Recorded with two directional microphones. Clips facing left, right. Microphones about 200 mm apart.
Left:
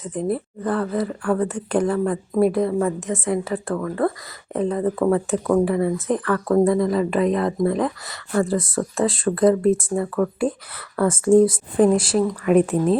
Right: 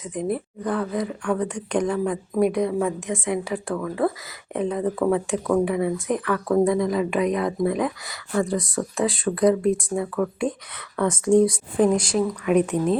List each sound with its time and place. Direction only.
0.0 s speech: centre (ahead or behind)